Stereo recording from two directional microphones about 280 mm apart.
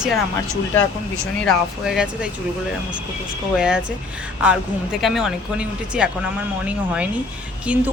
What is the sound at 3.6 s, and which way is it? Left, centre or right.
Speech, centre.